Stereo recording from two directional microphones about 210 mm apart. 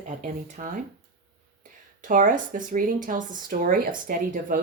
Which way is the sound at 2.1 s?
40° right (ahead or behind).